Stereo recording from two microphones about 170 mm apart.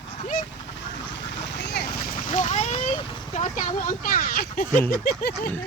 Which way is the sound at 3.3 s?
50° left (ahead or behind).